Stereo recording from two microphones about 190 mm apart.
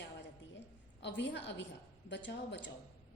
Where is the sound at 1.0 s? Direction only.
70° left (ahead or behind).